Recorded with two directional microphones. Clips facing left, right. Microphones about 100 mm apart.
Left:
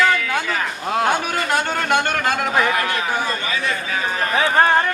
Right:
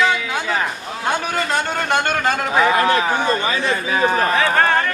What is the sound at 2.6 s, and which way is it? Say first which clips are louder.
A man's voice: right 4 dB; 25° right (ahead or behind).